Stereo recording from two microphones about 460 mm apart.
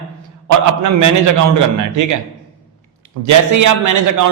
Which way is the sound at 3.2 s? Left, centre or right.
Right.